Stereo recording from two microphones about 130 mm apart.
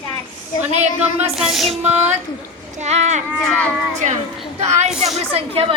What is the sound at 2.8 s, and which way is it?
Speech, 60° right (ahead or behind).